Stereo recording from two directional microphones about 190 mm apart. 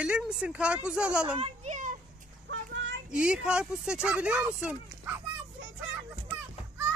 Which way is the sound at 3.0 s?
5° right (ahead or behind).